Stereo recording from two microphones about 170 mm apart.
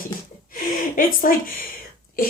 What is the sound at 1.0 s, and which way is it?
Speech, 55° left (ahead or behind).